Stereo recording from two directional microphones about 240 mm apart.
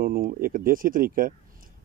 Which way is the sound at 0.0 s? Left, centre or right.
Right.